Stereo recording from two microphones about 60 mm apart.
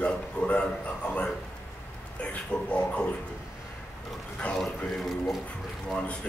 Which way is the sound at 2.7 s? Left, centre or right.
Centre.